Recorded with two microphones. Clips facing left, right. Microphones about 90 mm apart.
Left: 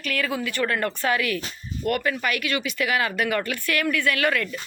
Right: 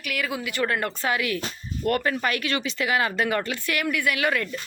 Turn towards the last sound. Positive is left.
turn(degrees=-20)  # may be behind; listen again after turning